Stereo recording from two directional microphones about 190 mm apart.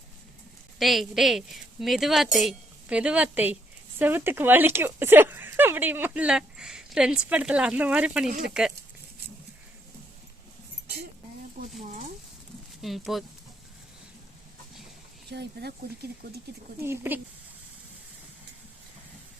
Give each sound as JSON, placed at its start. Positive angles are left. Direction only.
{"t": 0.8, "sound": "speech", "side_deg": 0}
{"t": 12.8, "sound": "speech", "side_deg": 0}
{"t": 15.3, "sound": "speech", "side_deg": -60}
{"t": 16.8, "sound": "speech", "side_deg": -10}